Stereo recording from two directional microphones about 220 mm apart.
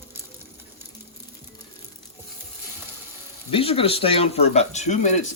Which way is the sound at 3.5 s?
25° left (ahead or behind).